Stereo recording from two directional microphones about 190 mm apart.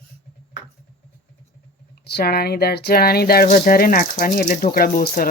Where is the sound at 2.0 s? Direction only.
55° left (ahead or behind).